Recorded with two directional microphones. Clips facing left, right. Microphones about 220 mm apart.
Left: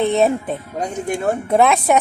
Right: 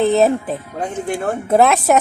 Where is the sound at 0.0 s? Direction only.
Centre (ahead or behind).